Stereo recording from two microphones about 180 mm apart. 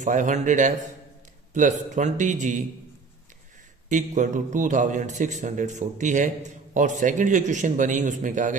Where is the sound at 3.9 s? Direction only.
45° right (ahead or behind).